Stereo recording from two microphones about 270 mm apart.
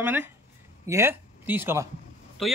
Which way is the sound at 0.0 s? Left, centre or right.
Centre.